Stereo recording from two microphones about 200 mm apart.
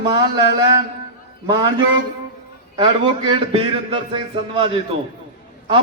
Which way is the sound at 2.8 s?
25° right (ahead or behind).